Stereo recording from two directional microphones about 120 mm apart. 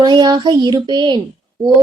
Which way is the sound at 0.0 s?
35° right (ahead or behind).